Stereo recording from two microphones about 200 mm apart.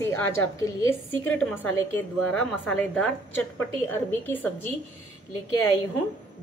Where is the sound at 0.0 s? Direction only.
15° left (ahead or behind).